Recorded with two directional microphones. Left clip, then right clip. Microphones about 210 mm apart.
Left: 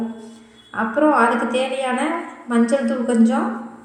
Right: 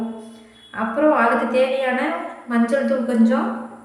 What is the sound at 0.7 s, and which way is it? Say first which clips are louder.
A woman's voice: left 1 dB; 10° left (ahead or behind).